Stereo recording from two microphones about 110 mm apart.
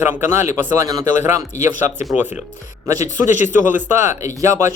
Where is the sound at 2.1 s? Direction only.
15° right (ahead or behind).